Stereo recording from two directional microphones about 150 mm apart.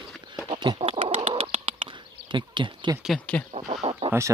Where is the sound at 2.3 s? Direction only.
30° right (ahead or behind).